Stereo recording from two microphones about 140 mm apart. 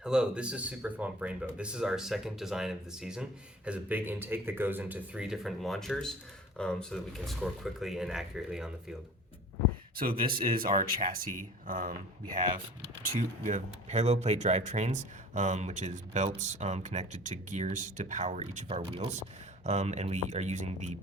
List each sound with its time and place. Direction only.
0.0 s speech: 5° right (ahead or behind)
10.3 s speech: 90° right
13.5 s speech: 55° right (ahead or behind)